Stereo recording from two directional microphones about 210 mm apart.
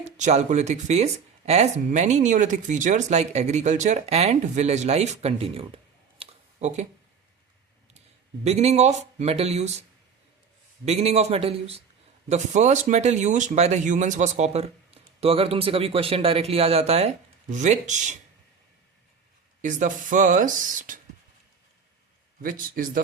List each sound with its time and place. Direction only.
0.0 s speech: 35° right (ahead or behind)
8.4 s speech: 30° right (ahead or behind)
10.8 s a man's voice: 30° right (ahead or behind)
19.6 s speech: 40° right (ahead or behind)
22.4 s speech: 40° right (ahead or behind)